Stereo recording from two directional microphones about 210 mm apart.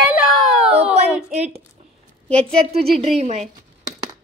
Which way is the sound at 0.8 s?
30° right (ahead or behind).